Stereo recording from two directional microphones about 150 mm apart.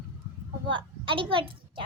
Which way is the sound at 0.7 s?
35° right (ahead or behind).